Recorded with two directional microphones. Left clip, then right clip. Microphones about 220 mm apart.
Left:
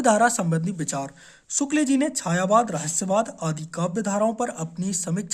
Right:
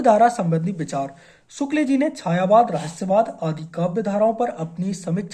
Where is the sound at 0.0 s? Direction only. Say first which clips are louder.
Right 4 dB; 30° left (ahead or behind).